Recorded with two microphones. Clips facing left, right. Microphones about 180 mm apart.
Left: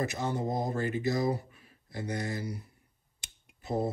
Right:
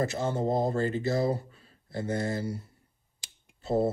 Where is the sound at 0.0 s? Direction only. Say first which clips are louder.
Right 3 dB; 15° left (ahead or behind).